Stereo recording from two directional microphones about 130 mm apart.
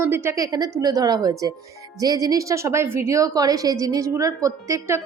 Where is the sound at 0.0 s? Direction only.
20° right (ahead or behind).